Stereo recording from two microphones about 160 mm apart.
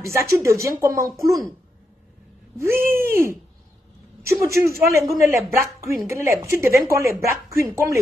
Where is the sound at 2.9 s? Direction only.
15° right (ahead or behind).